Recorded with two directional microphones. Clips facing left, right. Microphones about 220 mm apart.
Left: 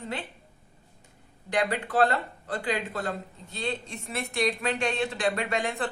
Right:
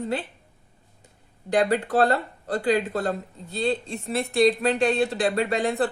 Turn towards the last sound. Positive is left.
turn(degrees=-35)  # may be behind; listen again after turning